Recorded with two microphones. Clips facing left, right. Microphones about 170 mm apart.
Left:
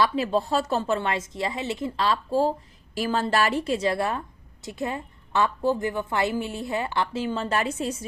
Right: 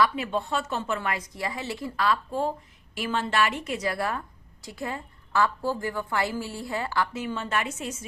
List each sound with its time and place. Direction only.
0.0 s a woman's voice: 35° left (ahead or behind)